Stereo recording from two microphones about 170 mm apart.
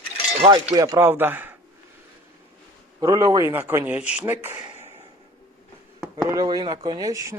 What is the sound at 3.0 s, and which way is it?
Speech, 20° right (ahead or behind).